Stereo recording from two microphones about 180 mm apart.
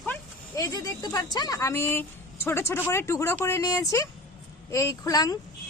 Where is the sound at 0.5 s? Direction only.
20° left (ahead or behind).